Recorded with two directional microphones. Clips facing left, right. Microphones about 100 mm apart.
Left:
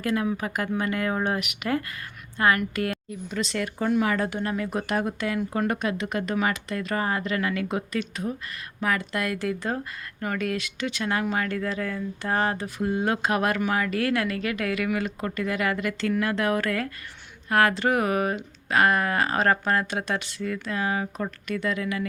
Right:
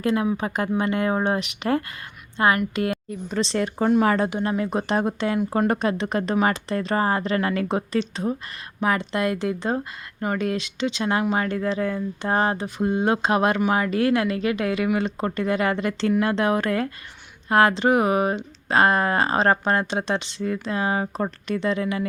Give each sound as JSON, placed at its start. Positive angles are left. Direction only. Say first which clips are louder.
{"t": 0.0, "sound": "a woman's voice", "louder": "right 4 dB", "side_deg": -25}
{"t": 3.1, "sound": "speech", "louder": "right 5 dB", "side_deg": -35}
{"t": 4.2, "sound": "speech", "louder": "right 4 dB", "side_deg": -20}